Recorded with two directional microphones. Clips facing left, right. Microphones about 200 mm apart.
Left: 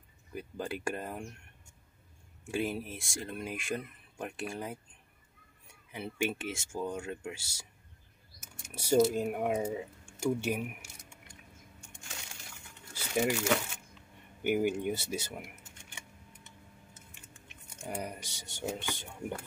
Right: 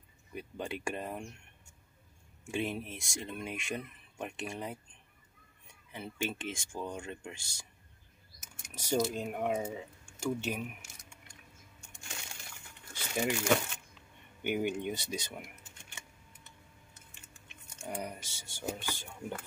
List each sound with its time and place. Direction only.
0.3 s speech: centre (ahead or behind)
2.5 s speech: 5° left (ahead or behind)
5.9 s speech: 10° left (ahead or behind)
8.7 s speech: 10° left (ahead or behind)
12.9 s crumpling: 5° left (ahead or behind)
14.4 s speech: 5° left (ahead or behind)
17.8 s speech: 10° left (ahead or behind)